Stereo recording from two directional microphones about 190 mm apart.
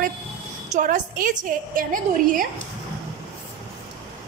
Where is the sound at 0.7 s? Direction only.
45° right (ahead or behind).